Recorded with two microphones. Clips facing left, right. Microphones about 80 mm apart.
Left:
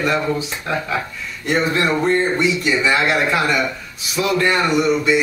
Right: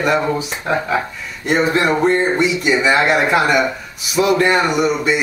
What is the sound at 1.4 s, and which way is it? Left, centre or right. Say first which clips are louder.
A man's voice: right 3 dB; centre.